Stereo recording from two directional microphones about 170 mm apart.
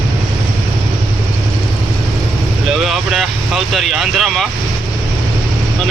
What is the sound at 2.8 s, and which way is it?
Vehicle, centre (ahead or behind).